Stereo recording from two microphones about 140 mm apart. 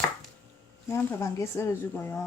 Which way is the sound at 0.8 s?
20° left (ahead or behind).